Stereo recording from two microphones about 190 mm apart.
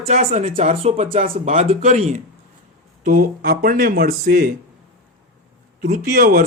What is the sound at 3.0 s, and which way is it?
Speech, 45° right (ahead or behind).